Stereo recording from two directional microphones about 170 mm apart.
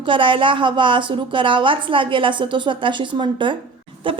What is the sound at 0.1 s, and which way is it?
A woman's voice, 30° right (ahead or behind).